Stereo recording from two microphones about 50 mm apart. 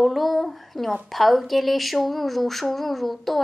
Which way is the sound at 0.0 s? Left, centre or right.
Centre.